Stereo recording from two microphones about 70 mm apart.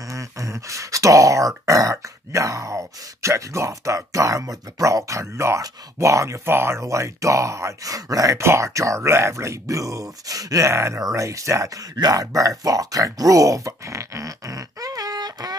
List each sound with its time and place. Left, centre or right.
0.1 s a sound: right
1.7 s grunt: right
8.4 s grunt: right
12.0 s speech: right